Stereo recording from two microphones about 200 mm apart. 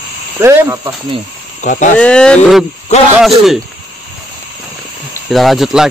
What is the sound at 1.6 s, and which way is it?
Speech, 40° left (ahead or behind).